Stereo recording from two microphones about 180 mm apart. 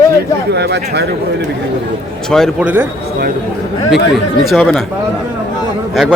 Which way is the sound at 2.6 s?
10° right (ahead or behind).